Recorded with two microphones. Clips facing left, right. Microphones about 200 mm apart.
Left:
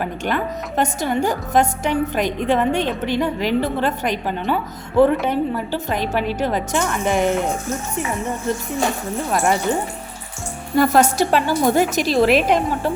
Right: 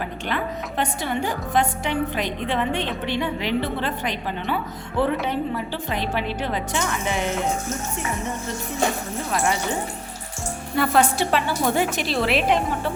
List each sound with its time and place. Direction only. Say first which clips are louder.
0.0 s a woman's voice: left 4 dB; 45° left (ahead or behind)
10.8 s a woman's voice: left 5 dB; 40° left (ahead or behind)